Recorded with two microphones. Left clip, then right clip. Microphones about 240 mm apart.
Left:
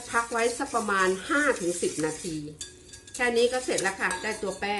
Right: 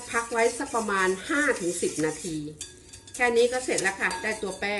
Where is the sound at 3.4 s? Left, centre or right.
Centre.